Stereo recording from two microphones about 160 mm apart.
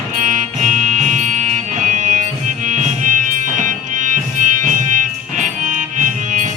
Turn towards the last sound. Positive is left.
turn(degrees=-50)  # may be behind; listen again after turning